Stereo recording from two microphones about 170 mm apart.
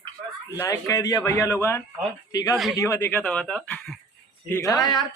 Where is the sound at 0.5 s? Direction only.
15° left (ahead or behind).